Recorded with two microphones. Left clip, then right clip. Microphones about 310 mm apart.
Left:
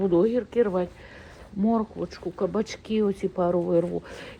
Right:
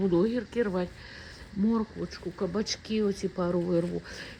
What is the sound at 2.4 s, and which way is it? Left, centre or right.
Speech, left.